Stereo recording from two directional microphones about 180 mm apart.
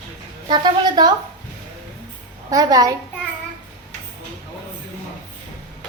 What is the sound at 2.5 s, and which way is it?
Speech, 20° right (ahead or behind).